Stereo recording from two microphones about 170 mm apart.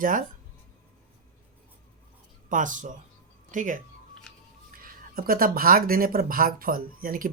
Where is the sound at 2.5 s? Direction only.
50° right (ahead or behind).